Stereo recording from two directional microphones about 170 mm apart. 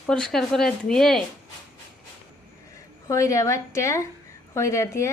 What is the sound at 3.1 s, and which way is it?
Speech, 20° left (ahead or behind).